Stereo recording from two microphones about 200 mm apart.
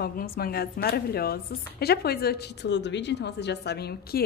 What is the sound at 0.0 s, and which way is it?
A woman's voice, 50° left (ahead or behind).